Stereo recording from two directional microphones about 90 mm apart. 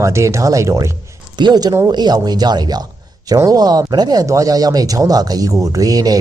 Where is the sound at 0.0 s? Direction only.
30° right (ahead or behind).